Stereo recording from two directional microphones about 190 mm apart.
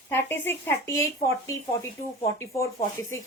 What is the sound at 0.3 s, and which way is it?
Speech, 10° left (ahead or behind).